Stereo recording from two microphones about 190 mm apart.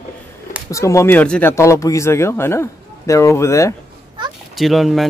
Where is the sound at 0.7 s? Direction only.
15° left (ahead or behind).